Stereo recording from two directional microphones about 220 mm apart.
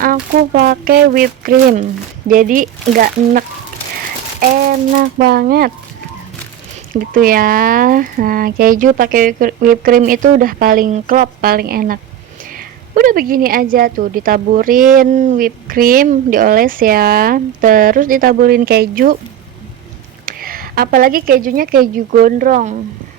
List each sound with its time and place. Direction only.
0.0 s speech: 40° right (ahead or behind)
4.9 s speech: 45° right (ahead or behind)
6.9 s speech: 40° right (ahead or behind)
20.2 s speech: 40° right (ahead or behind)